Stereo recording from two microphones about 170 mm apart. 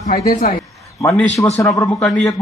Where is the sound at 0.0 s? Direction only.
50° left (ahead or behind).